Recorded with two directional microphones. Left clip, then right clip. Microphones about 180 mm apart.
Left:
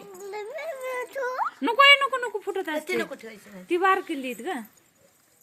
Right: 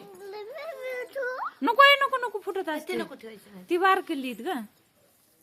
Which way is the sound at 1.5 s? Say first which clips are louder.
Left 1 dB; 10° right (ahead or behind).